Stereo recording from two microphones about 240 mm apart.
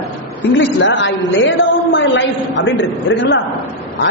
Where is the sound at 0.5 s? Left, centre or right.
Left.